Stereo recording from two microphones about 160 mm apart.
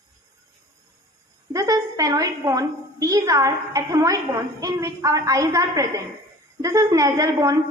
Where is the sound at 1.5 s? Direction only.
20° right (ahead or behind).